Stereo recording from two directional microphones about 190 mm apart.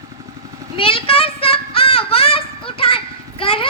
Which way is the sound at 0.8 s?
30° left (ahead or behind).